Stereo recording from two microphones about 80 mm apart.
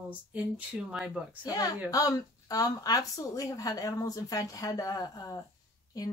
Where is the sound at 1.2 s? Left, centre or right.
Centre.